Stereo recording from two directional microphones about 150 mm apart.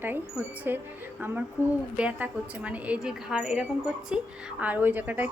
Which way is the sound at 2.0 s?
10° right (ahead or behind).